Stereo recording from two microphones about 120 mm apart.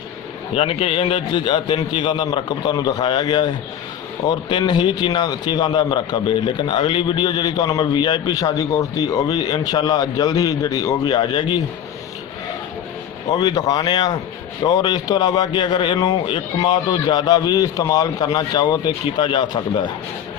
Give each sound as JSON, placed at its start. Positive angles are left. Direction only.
{"t": 0.5, "sound": "a man's voice", "side_deg": 55}
{"t": 13.3, "sound": "a man's voice", "side_deg": 35}